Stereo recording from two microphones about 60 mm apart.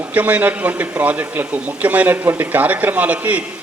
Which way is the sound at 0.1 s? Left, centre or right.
Right.